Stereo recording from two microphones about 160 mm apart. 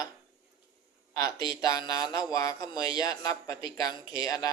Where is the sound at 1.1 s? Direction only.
25° left (ahead or behind).